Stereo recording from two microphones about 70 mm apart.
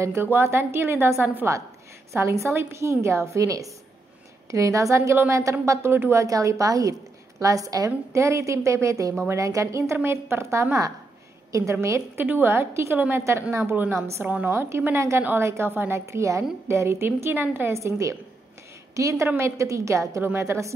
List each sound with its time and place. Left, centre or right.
0.0 s a woman's voice: right
1.2 s a woman's voice: right
2.1 s a woman's voice: right
6.2 s a woman's voice: right
8.1 s a woman's voice: right
11.8 s a woman's voice: right
12.3 s a woman's voice: right
14.2 s a woman's voice: right
15.0 s a woman's voice: right